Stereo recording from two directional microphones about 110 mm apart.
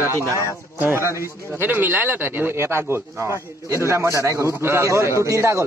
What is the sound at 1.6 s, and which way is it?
Speech, 20° right (ahead or behind).